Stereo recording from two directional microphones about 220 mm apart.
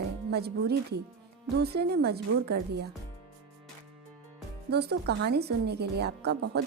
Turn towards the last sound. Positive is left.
turn(degrees=-50)  # may be behind; listen again after turning